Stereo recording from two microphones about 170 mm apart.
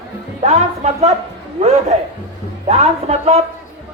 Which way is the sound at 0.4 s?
40° right (ahead or behind).